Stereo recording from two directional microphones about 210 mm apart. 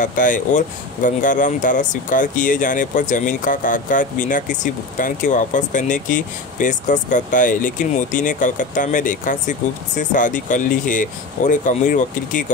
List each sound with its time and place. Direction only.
0.0 s speech: 40° left (ahead or behind)